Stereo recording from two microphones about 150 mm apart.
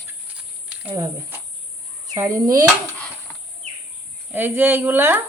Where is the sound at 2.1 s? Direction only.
20° right (ahead or behind).